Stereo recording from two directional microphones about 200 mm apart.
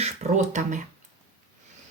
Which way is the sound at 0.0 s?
35° right (ahead or behind).